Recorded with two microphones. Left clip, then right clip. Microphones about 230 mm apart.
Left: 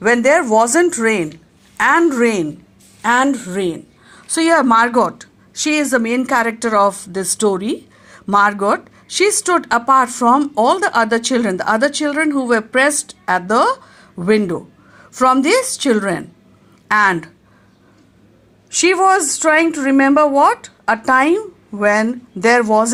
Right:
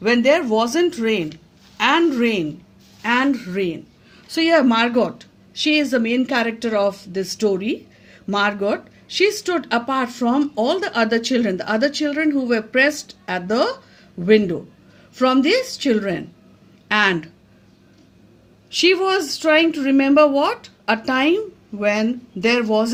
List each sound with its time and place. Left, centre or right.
0.0 s speech: left
18.9 s speech: centre